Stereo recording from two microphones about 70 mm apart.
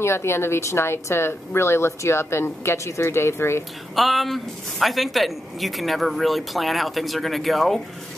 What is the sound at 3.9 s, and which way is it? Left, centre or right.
Speech, centre.